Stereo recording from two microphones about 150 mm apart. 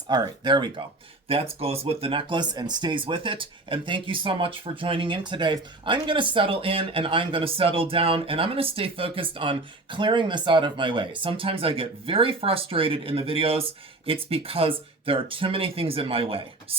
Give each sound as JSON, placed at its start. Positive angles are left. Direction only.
{"t": 0.1, "sound": "speech", "side_deg": -30}
{"t": 1.3, "sound": "speech", "side_deg": -40}